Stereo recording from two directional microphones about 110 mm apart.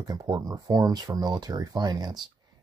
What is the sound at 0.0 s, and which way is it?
Speech, 35° right (ahead or behind).